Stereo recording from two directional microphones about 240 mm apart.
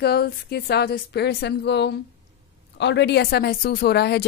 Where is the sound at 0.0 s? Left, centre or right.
Left.